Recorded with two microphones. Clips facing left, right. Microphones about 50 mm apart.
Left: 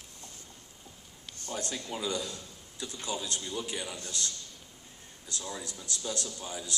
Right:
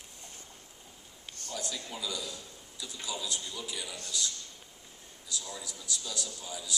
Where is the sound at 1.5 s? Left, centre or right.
Left.